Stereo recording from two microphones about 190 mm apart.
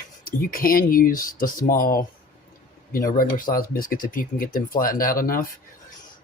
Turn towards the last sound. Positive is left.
turn(degrees=45)  # may be behind; listen again after turning